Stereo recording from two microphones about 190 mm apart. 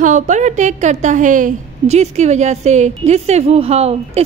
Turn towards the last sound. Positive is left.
turn(degrees=-35)  # may be behind; listen again after turning